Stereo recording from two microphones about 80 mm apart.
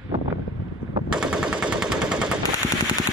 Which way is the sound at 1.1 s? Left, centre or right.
Centre.